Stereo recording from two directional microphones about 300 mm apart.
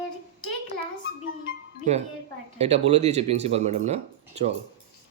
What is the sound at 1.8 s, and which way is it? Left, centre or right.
Speech, right.